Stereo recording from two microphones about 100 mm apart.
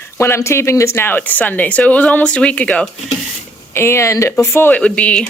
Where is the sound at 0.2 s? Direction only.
30° left (ahead or behind); by 2.8 s 15° left (ahead or behind).